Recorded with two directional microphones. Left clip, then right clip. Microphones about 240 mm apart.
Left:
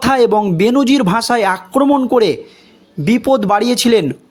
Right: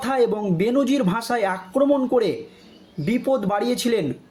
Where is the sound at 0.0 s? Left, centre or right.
Left.